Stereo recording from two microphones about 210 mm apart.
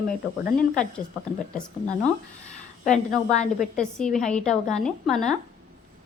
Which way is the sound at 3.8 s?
5° left (ahead or behind).